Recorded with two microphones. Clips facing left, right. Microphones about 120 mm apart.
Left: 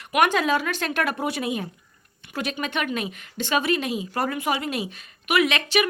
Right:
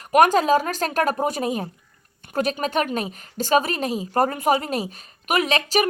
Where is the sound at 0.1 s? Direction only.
40° right (ahead or behind).